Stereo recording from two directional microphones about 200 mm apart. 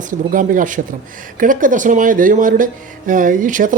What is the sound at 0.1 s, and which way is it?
Speech, 40° right (ahead or behind).